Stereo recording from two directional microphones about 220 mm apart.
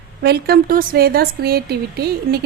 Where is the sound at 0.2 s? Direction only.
45° right (ahead or behind).